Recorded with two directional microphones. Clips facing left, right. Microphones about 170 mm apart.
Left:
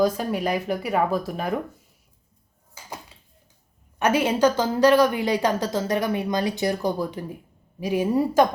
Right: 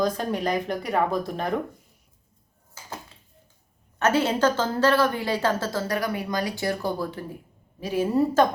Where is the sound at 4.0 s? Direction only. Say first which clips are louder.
Left 2 dB; 15° left (ahead or behind).